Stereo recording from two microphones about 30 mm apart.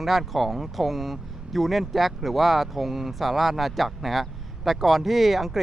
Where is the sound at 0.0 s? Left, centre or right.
Centre.